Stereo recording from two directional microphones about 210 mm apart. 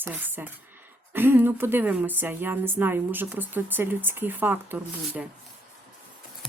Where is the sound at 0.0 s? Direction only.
10° right (ahead or behind).